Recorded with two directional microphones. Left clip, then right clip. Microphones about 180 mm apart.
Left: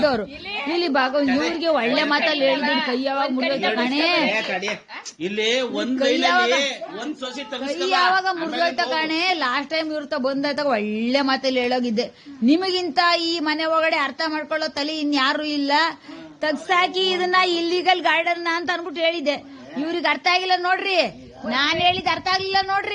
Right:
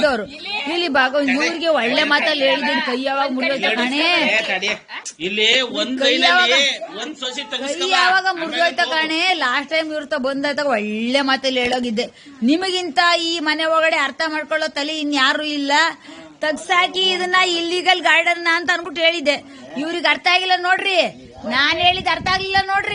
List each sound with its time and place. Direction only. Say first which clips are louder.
0.0 s a woman's voice: right 2 dB; centre (ahead or behind)
5.2 s speech: right 5 dB; 60° left (ahead or behind)
6.0 s a woman's voice: right 4 dB; centre (ahead or behind)
7.9 s a woman's voice: right 3 dB; centre (ahead or behind)
16.6 s speech: right 3 dB; 15° left (ahead or behind)
17.6 s a woman's voice: right 2 dB; centre (ahead or behind)